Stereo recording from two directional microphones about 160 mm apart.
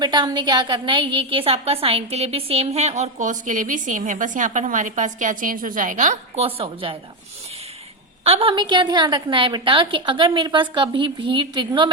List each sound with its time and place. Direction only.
0.0 s a woman's voice: 25° right (ahead or behind); by 6.4 s 50° right (ahead or behind)
6.4 s a woman's voice: 35° right (ahead or behind)
8.2 s a woman's voice: 35° right (ahead or behind)